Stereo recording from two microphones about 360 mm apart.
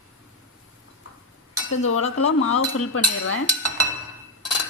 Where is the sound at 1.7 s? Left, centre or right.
Left.